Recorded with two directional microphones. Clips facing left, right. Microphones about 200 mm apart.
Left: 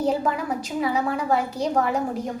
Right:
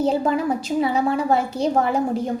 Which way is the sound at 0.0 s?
25° right (ahead or behind).